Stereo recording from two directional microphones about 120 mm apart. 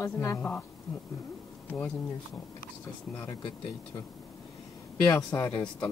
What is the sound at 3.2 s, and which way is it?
Speech, 40° left (ahead or behind).